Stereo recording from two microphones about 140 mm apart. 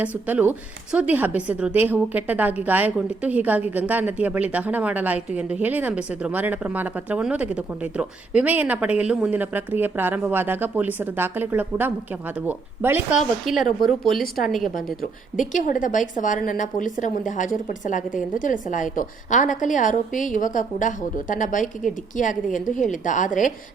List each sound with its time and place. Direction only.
0.3 s a woman's voice: 10° right (ahead or behind)
13.1 s speech: centre (ahead or behind)
15.4 s a woman's voice: 70° left (ahead or behind)